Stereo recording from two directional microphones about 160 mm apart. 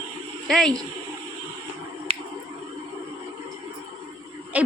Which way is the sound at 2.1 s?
35° right (ahead or behind).